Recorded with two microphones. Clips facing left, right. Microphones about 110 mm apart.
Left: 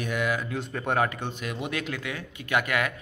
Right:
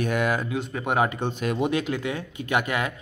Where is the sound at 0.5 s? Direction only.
5° right (ahead or behind).